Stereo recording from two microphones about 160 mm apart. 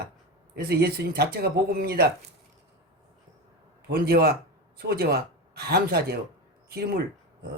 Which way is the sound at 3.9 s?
75° right (ahead or behind).